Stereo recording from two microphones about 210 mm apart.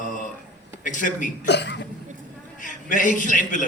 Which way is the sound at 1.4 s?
55° left (ahead or behind).